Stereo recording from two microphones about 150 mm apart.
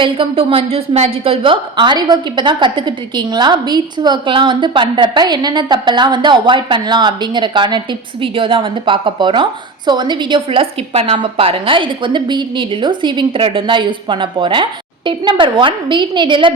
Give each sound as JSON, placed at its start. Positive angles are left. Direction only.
{"t": 0.0, "sound": "a woman's voice", "side_deg": -35}